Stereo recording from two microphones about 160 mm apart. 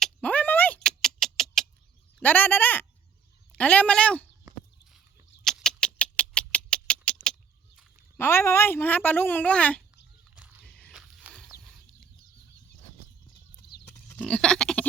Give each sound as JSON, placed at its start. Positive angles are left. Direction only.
{"t": 0.0, "sound": "a sound", "side_deg": 10}
{"t": 2.1, "sound": "a woman's voice", "side_deg": 10}
{"t": 5.5, "sound": "rodents", "side_deg": 5}
{"t": 8.1, "sound": "a woman's voice", "side_deg": 15}
{"t": 10.3, "sound": "a sound", "side_deg": -10}
{"t": 10.7, "sound": "biting", "side_deg": 5}
{"t": 10.9, "sound": "a sound", "side_deg": -5}
{"t": 13.6, "sound": "pig", "side_deg": 75}
{"t": 14.1, "sound": "goat", "side_deg": 5}